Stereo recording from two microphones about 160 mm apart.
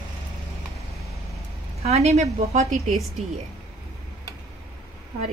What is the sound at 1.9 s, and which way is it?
Speech, 40° right (ahead or behind).